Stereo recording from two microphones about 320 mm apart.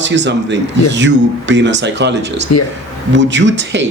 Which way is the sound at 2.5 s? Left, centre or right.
Left.